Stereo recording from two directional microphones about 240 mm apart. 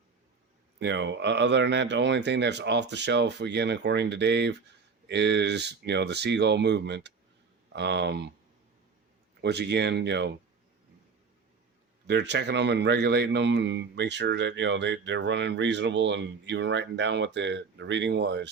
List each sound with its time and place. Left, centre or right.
0.8 s a man's voice: right
9.4 s a man's voice: right
12.0 s a man's voice: right